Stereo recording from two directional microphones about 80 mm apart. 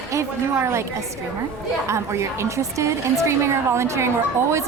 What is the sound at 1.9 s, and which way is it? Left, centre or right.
A woman's voice, right.